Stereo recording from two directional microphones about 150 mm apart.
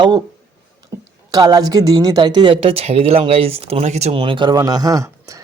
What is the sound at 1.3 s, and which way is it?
A woman's voice, 25° right (ahead or behind).